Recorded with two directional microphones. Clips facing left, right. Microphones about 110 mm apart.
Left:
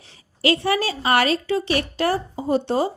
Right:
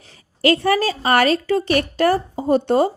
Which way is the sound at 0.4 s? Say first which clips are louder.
Right 4 dB; 45° right (ahead or behind).